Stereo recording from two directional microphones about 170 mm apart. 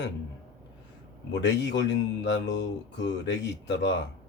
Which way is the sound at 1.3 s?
90° left.